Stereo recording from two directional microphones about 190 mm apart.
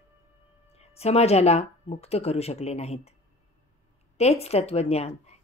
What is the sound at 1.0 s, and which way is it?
Speech, 35° left (ahead or behind).